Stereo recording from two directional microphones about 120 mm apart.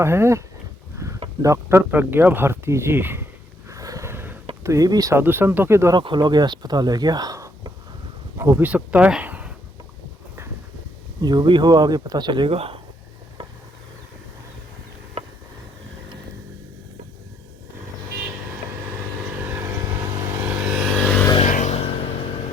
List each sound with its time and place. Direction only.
0.0 s speech: 20° right (ahead or behind)
0.9 s a sound: 25° right (ahead or behind)
1.4 s speech: 25° right (ahead or behind)
3.7 s a sound: 30° right (ahead or behind)
4.6 s speech: 30° right (ahead or behind)
6.0 s speech: 40° right (ahead or behind); by 9.5 s 10° right (ahead or behind)
11.2 s speech: 35° right (ahead or behind); by 12.8 s 50° right (ahead or behind)
19.5 s vehicle: 20° right (ahead or behind)
21.4 s a sound: 85° left